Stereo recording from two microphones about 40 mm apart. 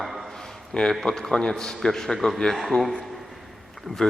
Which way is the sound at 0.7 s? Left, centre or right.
Centre.